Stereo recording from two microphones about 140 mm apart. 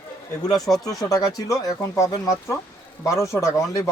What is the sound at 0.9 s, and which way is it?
Speech, 25° left (ahead or behind).